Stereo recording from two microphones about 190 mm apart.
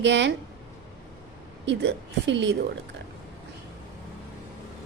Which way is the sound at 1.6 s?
65° right (ahead or behind).